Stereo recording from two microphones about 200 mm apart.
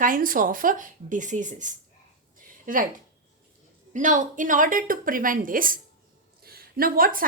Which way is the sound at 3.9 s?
40° right (ahead or behind).